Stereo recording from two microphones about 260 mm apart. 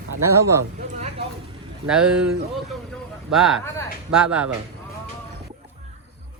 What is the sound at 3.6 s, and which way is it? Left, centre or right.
Speech, centre.